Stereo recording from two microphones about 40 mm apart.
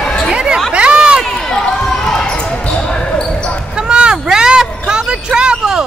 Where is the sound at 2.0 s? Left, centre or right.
Centre.